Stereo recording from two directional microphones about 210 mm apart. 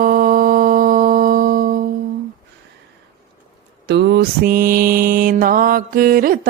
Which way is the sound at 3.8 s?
50° right (ahead or behind).